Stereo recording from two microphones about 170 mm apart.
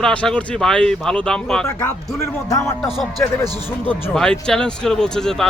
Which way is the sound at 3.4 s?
25° right (ahead or behind).